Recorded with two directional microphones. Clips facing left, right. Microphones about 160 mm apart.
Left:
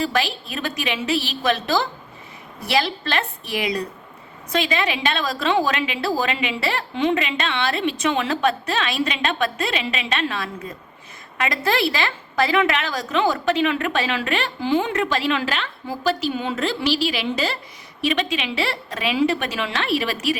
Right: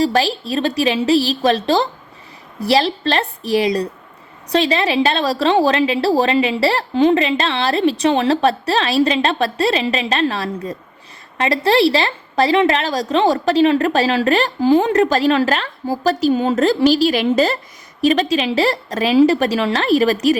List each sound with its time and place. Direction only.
0.0 s a woman's voice: 35° right (ahead or behind)